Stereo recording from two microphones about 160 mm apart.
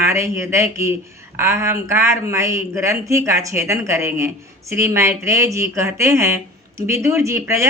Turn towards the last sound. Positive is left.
turn(degrees=-15)  # may be behind; listen again after turning